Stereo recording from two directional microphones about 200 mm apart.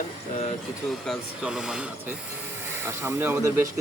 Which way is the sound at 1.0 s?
Centre (ahead or behind).